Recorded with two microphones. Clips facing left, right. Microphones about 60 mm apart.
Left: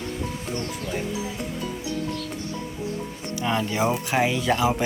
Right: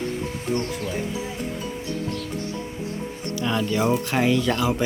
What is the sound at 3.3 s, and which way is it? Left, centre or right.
Speech, left.